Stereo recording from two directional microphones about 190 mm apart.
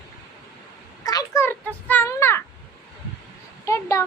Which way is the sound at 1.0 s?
15° left (ahead or behind).